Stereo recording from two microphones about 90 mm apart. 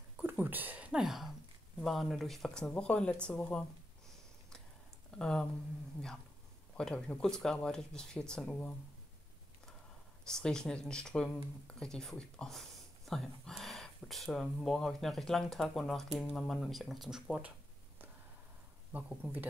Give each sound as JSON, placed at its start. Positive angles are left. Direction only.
{"t": 0.2, "sound": "a sound", "side_deg": -20}
{"t": 1.0, "sound": "a sound", "side_deg": 0}
{"t": 1.8, "sound": "speech", "side_deg": 5}
{"t": 5.2, "sound": "speech", "side_deg": 10}
{"t": 6.8, "sound": "speech", "side_deg": 5}
{"t": 10.2, "sound": "speech", "side_deg": 5}
{"t": 18.9, "sound": "speech", "side_deg": -15}